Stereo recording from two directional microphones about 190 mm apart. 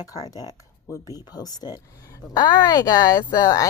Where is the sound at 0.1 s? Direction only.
20° left (ahead or behind).